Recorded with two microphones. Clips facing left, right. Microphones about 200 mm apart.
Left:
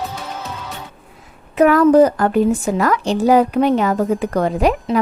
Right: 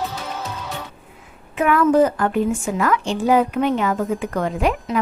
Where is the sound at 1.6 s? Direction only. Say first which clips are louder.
Left 5 dB; 40° left (ahead or behind).